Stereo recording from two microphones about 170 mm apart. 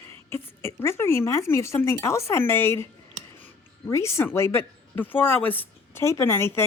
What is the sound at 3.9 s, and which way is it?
A woman's voice, 15° left (ahead or behind).